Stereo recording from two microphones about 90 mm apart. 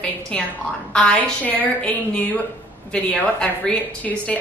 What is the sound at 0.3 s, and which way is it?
A woman's voice, 10° left (ahead or behind).